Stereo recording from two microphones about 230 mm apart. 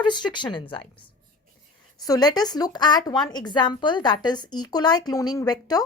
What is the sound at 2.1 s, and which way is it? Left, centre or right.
A woman's voice, centre.